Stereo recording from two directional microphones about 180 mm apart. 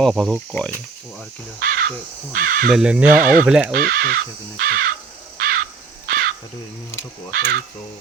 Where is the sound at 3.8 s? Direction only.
55° right (ahead or behind).